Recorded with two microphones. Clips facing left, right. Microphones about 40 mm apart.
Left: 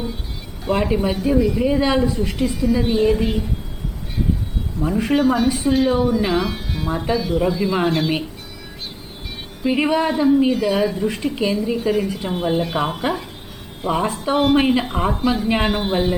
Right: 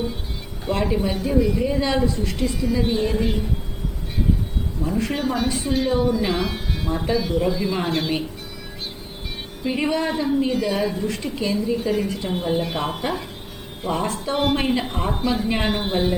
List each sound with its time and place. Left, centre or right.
0.7 s a woman's voice: centre
1.1 s speech: centre
1.6 s a woman's voice: centre
5.1 s speech: centre
9.6 s a woman's voice: centre
10.1 s speech: centre
11.0 s a woman's voice: centre
11.8 s speech: centre
12.2 s speech: left
12.6 s a woman's voice: centre
14.3 s speech: centre
14.6 s a woman's voice: centre
15.2 s a woman's voice: centre